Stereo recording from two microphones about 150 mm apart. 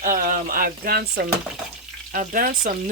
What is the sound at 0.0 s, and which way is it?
Speech, 65° right (ahead or behind).